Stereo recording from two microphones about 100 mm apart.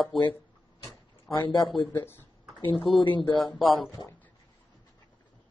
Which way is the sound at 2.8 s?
55° left (ahead or behind).